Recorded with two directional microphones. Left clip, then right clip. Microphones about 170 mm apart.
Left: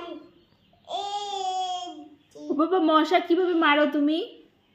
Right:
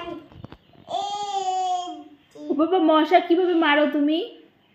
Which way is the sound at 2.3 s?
10° left (ahead or behind).